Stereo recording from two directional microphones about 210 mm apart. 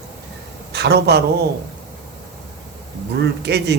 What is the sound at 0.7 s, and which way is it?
Speech, 50° right (ahead or behind).